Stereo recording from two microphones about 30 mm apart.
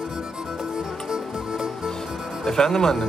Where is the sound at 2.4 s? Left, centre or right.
Centre.